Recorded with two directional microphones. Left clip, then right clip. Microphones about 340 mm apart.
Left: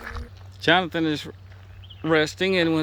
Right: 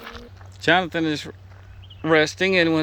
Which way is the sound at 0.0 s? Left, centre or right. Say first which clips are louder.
Left 1 dB; right.